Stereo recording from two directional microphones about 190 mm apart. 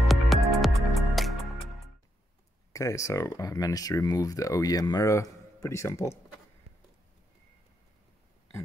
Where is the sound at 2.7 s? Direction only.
15° left (ahead or behind).